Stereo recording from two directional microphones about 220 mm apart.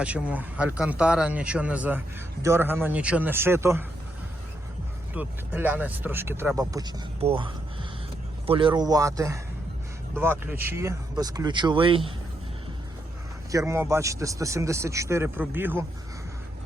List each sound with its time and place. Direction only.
0.0 s speech: 5° right (ahead or behind)
5.1 s speech: 10° right (ahead or behind); by 12.1 s 25° right (ahead or behind)
13.5 s speech: 15° right (ahead or behind)